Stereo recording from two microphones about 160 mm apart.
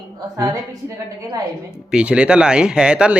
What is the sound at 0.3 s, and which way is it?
A woman's voice, 20° right (ahead or behind).